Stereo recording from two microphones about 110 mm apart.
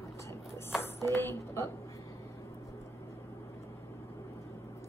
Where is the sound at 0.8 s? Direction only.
20° left (ahead or behind).